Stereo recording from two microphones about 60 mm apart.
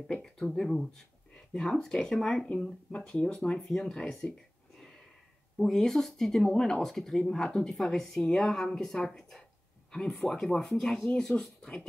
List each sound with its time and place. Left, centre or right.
0.0 s speech: centre
2.5 s speech: left
4.7 s a sound: centre
5.6 s speech: centre